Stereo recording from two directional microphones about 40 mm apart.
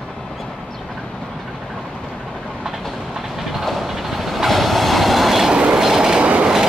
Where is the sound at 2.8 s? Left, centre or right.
Centre.